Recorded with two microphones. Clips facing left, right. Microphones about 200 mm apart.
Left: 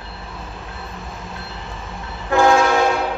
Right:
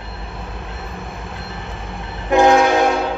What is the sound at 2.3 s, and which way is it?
Train, 20° right (ahead or behind).